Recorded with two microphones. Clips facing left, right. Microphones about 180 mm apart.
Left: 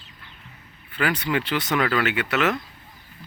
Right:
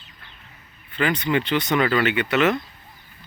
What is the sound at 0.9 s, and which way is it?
Speech, 10° left (ahead or behind).